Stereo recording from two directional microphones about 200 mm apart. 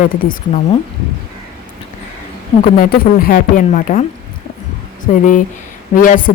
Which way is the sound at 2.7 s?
45° left (ahead or behind).